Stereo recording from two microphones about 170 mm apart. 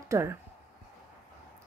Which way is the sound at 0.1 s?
15° right (ahead or behind).